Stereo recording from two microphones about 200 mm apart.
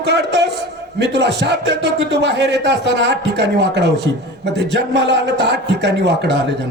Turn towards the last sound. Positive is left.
turn(degrees=-60)  # may be behind; listen again after turning